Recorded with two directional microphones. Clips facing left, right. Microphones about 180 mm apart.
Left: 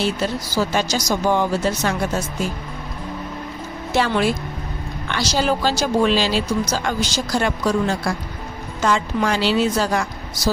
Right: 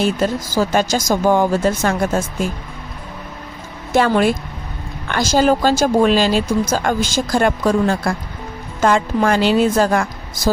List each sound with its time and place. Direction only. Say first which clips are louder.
0.0 s speech: right 4 dB; 50° right (ahead or behind)
3.9 s speech: right 4 dB; 50° right (ahead or behind)